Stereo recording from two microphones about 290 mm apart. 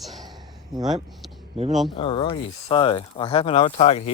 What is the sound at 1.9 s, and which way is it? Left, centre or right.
Speech, centre.